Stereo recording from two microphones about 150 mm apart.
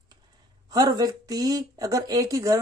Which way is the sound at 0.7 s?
25° right (ahead or behind).